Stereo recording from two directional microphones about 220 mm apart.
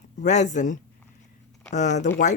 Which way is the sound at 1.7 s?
35° left (ahead or behind).